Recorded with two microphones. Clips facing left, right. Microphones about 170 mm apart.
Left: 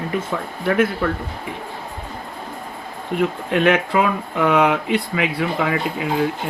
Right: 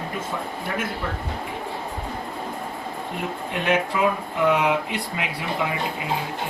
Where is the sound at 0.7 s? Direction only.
75° left (ahead or behind).